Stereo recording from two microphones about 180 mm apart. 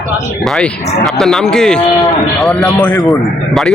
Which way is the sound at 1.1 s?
Centre (ahead or behind).